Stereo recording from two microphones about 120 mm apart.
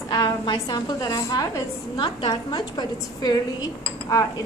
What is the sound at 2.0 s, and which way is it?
A woman's voice, 40° left (ahead or behind).